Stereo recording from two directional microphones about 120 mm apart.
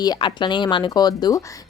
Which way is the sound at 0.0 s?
40° left (ahead or behind).